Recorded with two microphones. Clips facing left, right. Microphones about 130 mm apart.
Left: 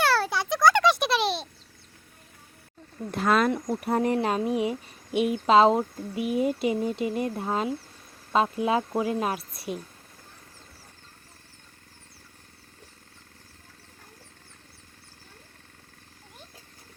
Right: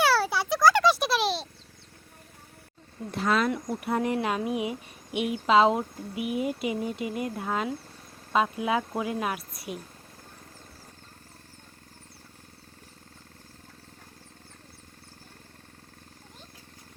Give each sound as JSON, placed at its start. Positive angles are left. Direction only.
{"t": 0.0, "sound": "a sound", "side_deg": -5}
{"t": 3.1, "sound": "speech", "side_deg": 50}
{"t": 3.5, "sound": "speech", "side_deg": 40}